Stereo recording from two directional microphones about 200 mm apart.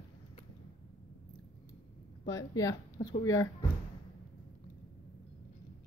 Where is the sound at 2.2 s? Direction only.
15° left (ahead or behind).